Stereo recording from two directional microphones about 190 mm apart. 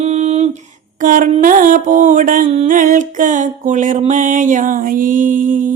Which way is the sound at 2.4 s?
35° right (ahead or behind).